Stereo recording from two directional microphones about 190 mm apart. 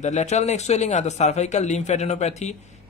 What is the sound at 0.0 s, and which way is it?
Speech, 40° left (ahead or behind).